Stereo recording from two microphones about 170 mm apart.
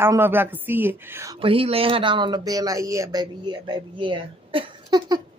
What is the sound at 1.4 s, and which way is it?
Speech, 35° right (ahead or behind).